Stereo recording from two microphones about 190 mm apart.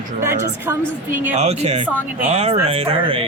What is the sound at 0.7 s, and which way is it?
Speech, 15° right (ahead or behind).